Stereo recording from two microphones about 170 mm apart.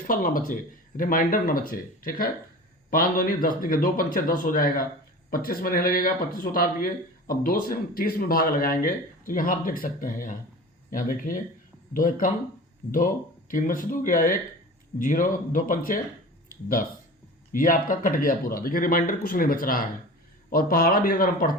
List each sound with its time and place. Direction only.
0.1 s speech: 55° left (ahead or behind)
17.5 s speech: 55° left (ahead or behind)